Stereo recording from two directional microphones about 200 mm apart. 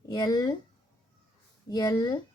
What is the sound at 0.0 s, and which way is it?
Speech, 20° left (ahead or behind).